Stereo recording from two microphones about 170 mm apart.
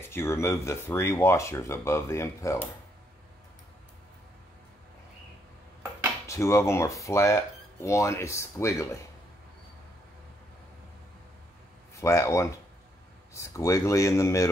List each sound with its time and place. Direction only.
0.0 s speech: 15° left (ahead or behind)
6.2 s speech: 15° left (ahead or behind)
11.9 s speech: 15° left (ahead or behind)